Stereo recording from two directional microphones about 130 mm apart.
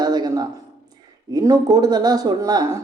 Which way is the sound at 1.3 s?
30° right (ahead or behind).